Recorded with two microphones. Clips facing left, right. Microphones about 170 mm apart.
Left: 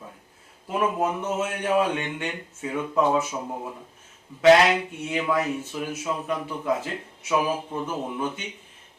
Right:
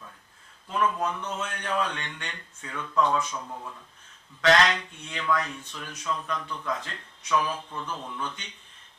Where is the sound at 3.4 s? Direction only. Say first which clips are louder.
Left 6 dB; 20° left (ahead or behind).